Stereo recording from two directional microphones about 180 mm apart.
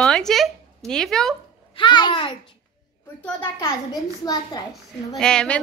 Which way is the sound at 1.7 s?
25° left (ahead or behind).